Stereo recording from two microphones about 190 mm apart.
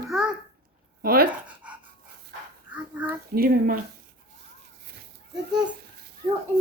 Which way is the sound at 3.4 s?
55° right (ahead or behind).